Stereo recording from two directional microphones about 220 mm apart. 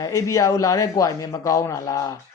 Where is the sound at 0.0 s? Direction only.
15° left (ahead or behind).